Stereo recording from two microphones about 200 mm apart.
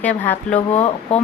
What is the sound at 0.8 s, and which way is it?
Speech, 30° left (ahead or behind).